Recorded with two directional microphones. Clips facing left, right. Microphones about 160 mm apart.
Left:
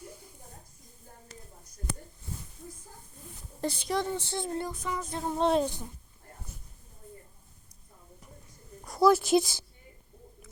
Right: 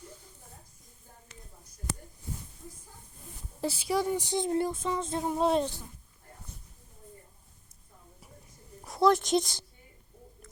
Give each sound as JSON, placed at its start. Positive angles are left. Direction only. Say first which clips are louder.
{"t": 1.3, "sound": "a sound", "louder": "left 4 dB", "side_deg": 40}
{"t": 3.6, "sound": "speech", "louder": "right 1 dB", "side_deg": -5}
{"t": 5.2, "sound": "speech", "louder": "left 1 dB", "side_deg": -5}
{"t": 8.8, "sound": "speech", "louder": "left 2 dB", "side_deg": 0}